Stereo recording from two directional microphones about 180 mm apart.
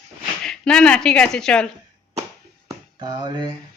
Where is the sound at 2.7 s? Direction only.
25° right (ahead or behind).